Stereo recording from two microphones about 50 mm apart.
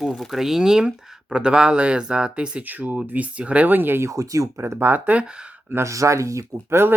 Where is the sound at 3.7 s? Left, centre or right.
Right.